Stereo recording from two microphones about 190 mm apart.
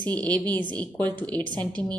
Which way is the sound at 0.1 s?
5° left (ahead or behind).